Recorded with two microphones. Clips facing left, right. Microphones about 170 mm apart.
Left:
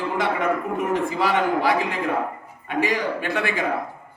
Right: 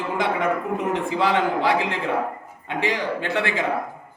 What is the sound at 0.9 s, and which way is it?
A man's voice, 25° right (ahead or behind).